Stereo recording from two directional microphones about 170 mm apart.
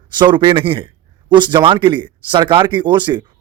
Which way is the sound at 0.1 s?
25° right (ahead or behind).